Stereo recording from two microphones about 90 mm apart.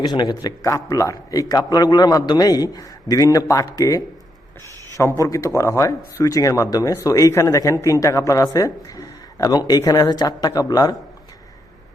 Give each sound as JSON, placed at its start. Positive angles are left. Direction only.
{"t": 0.0, "sound": "a man's voice", "side_deg": 55}